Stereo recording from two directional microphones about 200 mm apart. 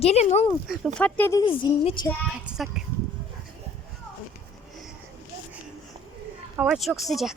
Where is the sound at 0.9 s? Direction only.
5° left (ahead or behind).